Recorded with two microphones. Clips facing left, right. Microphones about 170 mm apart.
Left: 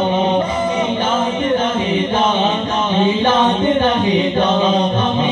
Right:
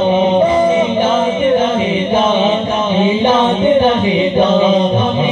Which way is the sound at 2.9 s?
15° right (ahead or behind).